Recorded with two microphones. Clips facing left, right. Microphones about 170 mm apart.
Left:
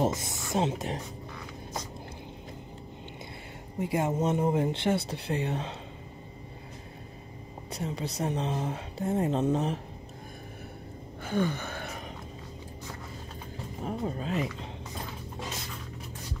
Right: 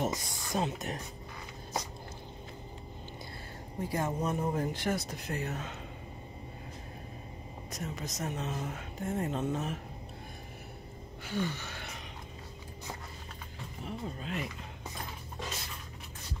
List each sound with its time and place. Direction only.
0.0 s speech: 25° left (ahead or behind)
3.8 s speech: 25° left (ahead or behind)
7.7 s a woman's voice: 30° left (ahead or behind)
11.2 s gasp: 50° left (ahead or behind)
13.8 s a woman's voice: 40° left (ahead or behind)